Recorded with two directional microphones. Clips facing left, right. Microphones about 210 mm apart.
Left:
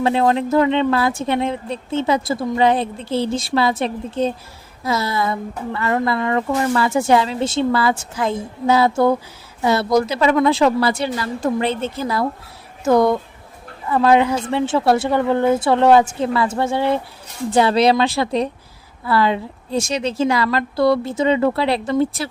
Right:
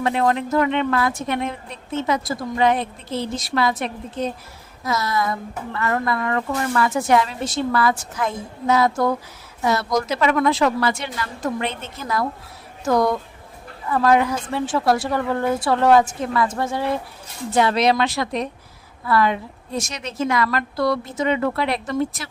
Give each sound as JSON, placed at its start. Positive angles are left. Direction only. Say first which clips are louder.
{"t": 0.0, "sound": "a woman's voice", "louder": "left 3 dB", "side_deg": 30}